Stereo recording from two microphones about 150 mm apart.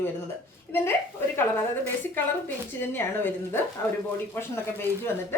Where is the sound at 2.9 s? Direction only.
15° left (ahead or behind).